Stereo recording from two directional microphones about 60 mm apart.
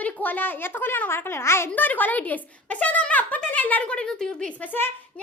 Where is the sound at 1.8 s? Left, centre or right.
Left; by 4.5 s centre.